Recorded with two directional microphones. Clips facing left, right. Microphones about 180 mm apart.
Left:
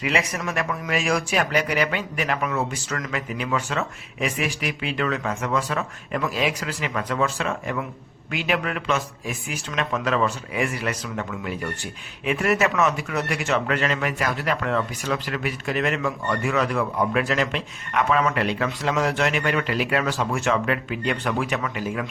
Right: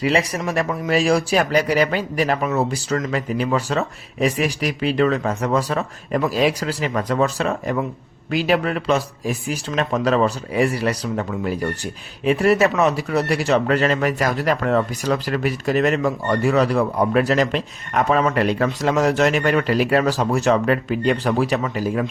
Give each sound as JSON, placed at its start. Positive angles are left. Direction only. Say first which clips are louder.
{"t": 0.0, "sound": "speech", "louder": "right 5 dB", "side_deg": -35}